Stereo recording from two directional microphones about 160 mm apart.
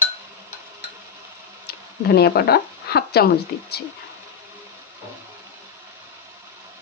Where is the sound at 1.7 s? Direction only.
80° left.